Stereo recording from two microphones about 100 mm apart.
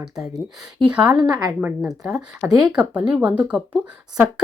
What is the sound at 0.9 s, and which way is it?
Speech, 10° right (ahead or behind).